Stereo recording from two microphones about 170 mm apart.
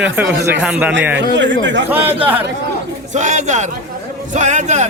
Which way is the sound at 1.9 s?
10° right (ahead or behind).